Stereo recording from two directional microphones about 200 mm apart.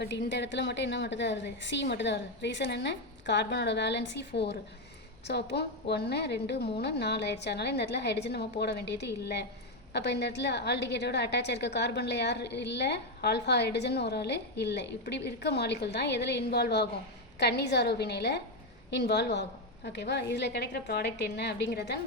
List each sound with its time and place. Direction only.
0.0 s a woman's voice: 60° left (ahead or behind)